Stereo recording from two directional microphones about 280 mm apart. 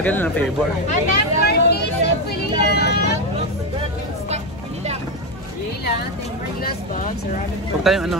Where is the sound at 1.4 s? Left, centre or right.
Left.